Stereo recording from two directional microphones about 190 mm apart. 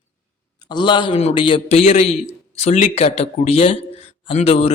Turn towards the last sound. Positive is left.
turn(degrees=35)  # may be behind; listen again after turning